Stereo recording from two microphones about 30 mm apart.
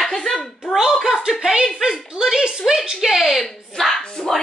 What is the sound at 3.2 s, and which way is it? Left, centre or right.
Speech, centre.